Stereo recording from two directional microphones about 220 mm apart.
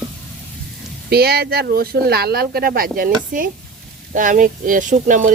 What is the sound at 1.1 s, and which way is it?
Speech, 45° right (ahead or behind).